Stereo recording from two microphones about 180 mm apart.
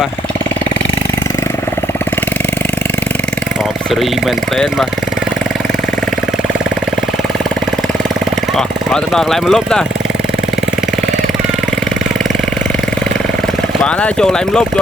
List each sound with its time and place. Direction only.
4.5 s speech: centre (ahead or behind)
8.5 s speech: 5° left (ahead or behind)
13.8 s speech: 5° left (ahead or behind)